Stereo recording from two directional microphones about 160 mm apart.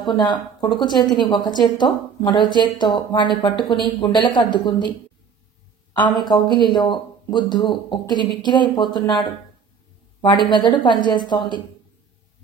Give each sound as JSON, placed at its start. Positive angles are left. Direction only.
{"t": 0.0, "sound": "a man's voice", "side_deg": 30}
{"t": 5.9, "sound": "a man's voice", "side_deg": 25}
{"t": 10.5, "sound": "a man's voice", "side_deg": 30}